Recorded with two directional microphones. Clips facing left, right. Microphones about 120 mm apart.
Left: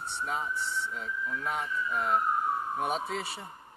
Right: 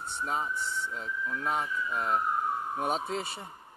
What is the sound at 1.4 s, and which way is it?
Speech, 30° right (ahead or behind).